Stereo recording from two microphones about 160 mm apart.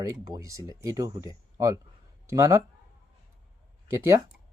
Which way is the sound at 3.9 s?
20° right (ahead or behind).